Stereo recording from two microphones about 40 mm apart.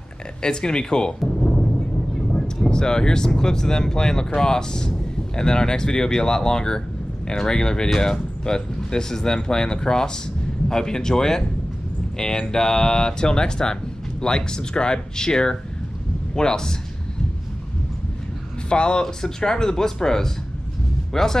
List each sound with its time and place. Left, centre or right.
0.4 s speech: left
2.1 s speech: centre
18.7 s speech: left